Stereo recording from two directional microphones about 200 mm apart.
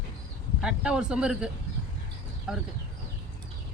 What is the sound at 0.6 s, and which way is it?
Speech, 5° right (ahead or behind).